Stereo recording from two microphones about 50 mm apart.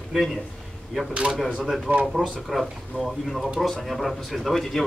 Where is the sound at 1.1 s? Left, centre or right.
Right.